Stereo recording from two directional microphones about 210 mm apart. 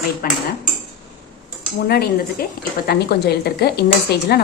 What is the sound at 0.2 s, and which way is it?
Speech, 45° left (ahead or behind).